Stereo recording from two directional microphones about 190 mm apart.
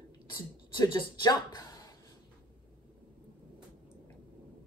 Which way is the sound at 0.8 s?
20° left (ahead or behind).